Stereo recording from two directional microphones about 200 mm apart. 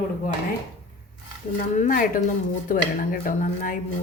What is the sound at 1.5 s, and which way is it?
A woman's voice, 40° left (ahead or behind).